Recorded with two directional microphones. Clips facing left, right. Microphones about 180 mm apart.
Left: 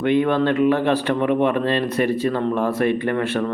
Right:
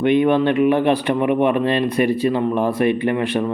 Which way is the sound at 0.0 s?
15° right (ahead or behind).